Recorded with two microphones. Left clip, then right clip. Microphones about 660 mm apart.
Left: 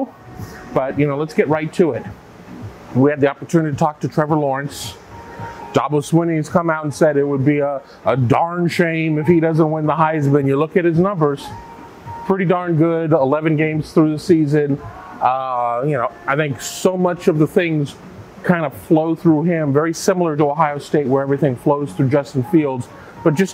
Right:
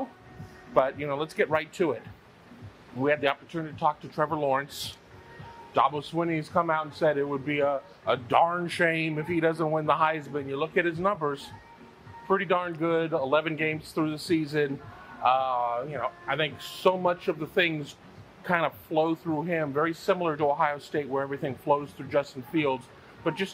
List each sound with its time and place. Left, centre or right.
0.7 s speech: left
3.0 s speech: left
5.7 s speech: left
6.1 s speech: left
10.3 s speech: left
10.7 s speech: left
13.1 s speech: left
15.2 s speech: left